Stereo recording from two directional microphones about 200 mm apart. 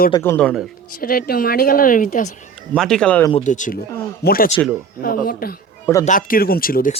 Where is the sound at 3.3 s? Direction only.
40° left (ahead or behind).